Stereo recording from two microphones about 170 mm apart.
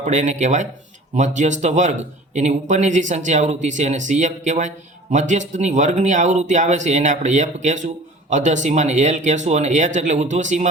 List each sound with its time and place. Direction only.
0.0 s speech: 45° right (ahead or behind)